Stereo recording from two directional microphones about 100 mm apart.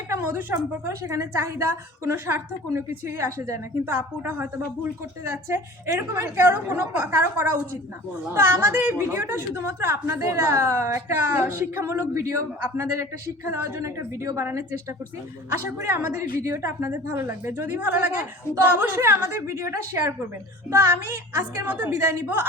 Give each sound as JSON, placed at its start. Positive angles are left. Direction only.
{"t": 0.1, "sound": "a woman's voice", "side_deg": -15}
{"t": 1.0, "sound": "a woman's voice", "side_deg": -30}
{"t": 2.0, "sound": "a woman's voice", "side_deg": -20}
{"t": 5.5, "sound": "a woman's voice", "side_deg": -30}